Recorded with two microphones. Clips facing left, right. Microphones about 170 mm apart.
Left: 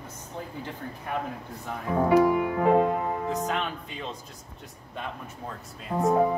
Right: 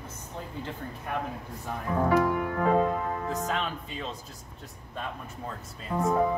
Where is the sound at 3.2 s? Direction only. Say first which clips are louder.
Left 2 dB; centre (ahead or behind).